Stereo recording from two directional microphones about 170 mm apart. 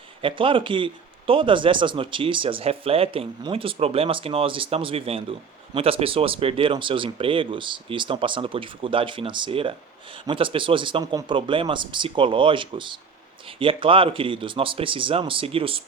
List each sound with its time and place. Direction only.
0.2 s speech: 30° right (ahead or behind)